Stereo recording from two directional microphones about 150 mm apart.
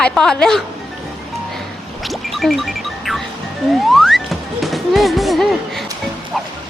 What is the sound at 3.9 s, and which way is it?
Music, centre (ahead or behind).